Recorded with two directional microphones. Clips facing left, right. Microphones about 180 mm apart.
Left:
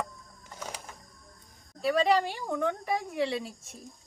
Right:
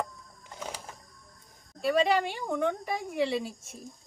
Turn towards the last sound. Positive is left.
turn(degrees=0)  # may be behind; listen again after turning